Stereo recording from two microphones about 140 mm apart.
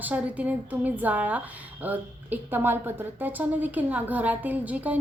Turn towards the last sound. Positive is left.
turn(degrees=-10)  # may be behind; listen again after turning